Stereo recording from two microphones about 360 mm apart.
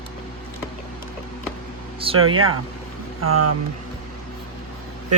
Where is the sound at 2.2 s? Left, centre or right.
Right.